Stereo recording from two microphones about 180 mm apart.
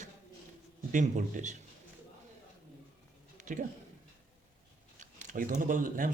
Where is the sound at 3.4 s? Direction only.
45° right (ahead or behind).